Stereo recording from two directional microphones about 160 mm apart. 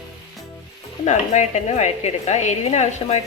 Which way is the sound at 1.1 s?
45° left (ahead or behind).